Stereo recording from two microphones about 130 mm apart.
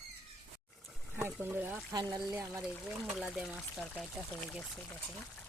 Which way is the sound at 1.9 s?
30° right (ahead or behind).